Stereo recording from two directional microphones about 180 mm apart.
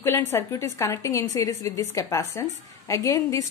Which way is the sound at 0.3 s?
15° left (ahead or behind).